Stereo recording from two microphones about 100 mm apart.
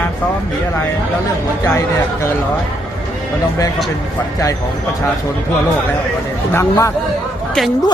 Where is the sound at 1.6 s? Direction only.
30° left (ahead or behind).